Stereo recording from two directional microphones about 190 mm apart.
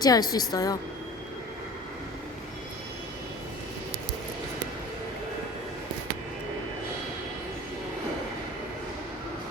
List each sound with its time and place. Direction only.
0.0 s a woman's voice: 20° left (ahead or behind)